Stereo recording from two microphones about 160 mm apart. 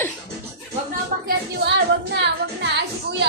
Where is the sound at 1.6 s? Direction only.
90° right.